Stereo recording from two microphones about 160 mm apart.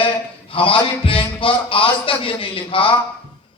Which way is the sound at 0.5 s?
35° left (ahead or behind).